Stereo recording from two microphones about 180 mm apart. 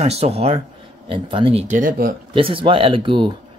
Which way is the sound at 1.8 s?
55° right (ahead or behind).